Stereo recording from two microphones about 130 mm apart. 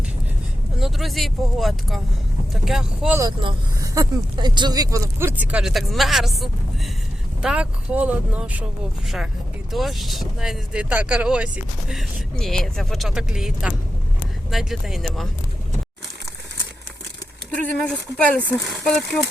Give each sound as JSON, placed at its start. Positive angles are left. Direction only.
{"t": 0.8, "sound": "speech", "side_deg": 0}
{"t": 3.8, "sound": "speech", "side_deg": -25}
{"t": 5.4, "sound": "speech", "side_deg": -10}
{"t": 17.5, "sound": "speech", "side_deg": 10}